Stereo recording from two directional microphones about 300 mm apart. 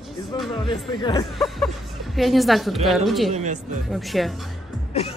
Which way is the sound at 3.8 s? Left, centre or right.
Centre.